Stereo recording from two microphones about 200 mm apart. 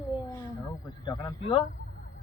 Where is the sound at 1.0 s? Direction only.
20° left (ahead or behind).